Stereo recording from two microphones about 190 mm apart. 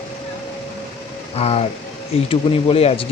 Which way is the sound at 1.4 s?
30° left (ahead or behind).